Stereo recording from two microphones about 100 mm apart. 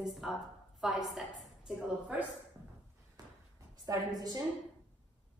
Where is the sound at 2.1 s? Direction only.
15° right (ahead or behind).